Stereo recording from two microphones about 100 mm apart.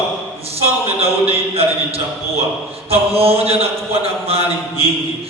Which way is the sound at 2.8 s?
80° right.